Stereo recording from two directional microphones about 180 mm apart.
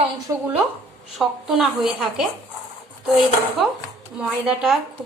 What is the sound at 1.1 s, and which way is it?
A woman's voice, centre (ahead or behind).